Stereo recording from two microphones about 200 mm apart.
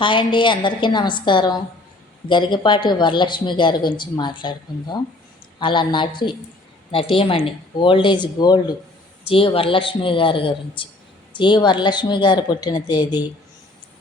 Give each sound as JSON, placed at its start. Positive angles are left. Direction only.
{"t": 0.0, "sound": "speech", "side_deg": 25}